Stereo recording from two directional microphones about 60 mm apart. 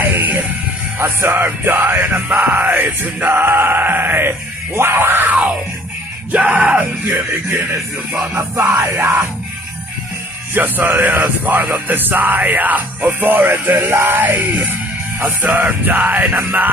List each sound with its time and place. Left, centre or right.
0.0 s music: right
9.0 s music: right
10.5 s music: right